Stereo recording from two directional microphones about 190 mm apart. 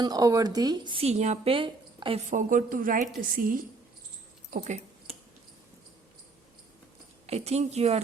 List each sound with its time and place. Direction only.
0.0 s a woman's voice: 20° right (ahead or behind)
2.3 s a woman's voice: 40° right (ahead or behind)
4.5 s a sound: 40° right (ahead or behind)
7.3 s a woman's voice: 35° right (ahead or behind)